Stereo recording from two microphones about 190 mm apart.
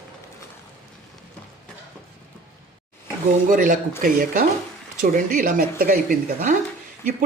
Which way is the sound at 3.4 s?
45° right (ahead or behind).